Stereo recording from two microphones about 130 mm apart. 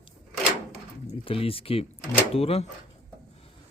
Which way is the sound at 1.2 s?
45° left (ahead or behind).